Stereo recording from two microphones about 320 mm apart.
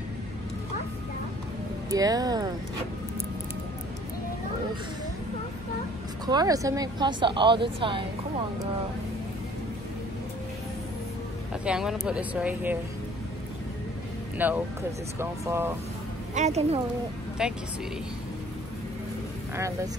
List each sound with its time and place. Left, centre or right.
1.9 s a woman's voice: centre
6.2 s a woman's voice: centre
11.6 s speech: centre
14.4 s a woman's voice: centre
16.3 s a woman's voice: right
17.4 s speech: centre